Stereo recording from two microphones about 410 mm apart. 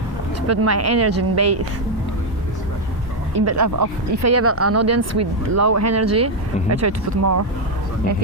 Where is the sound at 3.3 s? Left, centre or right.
Right.